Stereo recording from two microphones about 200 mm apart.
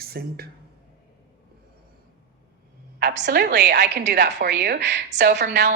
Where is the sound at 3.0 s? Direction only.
55° right (ahead or behind).